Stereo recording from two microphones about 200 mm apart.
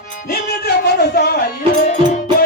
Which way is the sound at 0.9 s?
50° left (ahead or behind).